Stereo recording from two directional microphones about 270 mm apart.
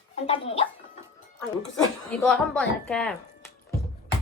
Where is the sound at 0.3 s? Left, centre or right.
Left.